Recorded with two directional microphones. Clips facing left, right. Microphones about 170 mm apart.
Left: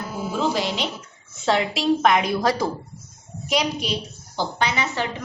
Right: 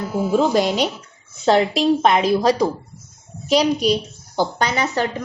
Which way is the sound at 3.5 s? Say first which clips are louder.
Right 7 dB; 35° right (ahead or behind).